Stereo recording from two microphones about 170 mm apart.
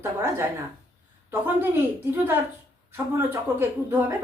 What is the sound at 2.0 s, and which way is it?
A woman's voice, 10° right (ahead or behind).